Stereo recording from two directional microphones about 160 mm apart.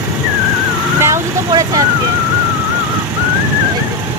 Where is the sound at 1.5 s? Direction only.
20° right (ahead or behind).